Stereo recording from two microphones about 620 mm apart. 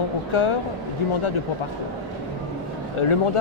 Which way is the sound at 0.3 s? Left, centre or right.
Left.